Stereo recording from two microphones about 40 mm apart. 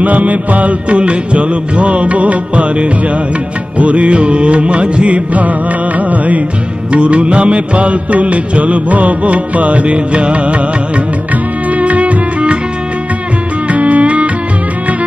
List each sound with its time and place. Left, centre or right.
0.0 s music: right
11.7 s music: right
13.7 s music: right